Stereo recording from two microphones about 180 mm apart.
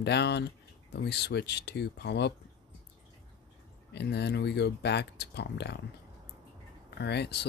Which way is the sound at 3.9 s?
70° left (ahead or behind).